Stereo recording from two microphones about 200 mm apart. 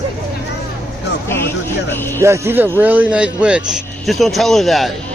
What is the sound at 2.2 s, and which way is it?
A man's voice, 15° right (ahead or behind).